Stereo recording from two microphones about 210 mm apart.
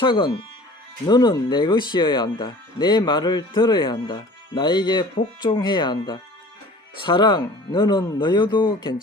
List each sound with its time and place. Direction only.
0.0 s speech: 25° left (ahead or behind)